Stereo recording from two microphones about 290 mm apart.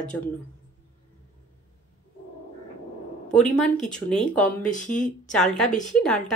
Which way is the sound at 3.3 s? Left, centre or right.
Centre.